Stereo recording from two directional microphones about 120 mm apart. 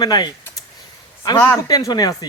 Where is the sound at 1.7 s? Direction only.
30° left (ahead or behind).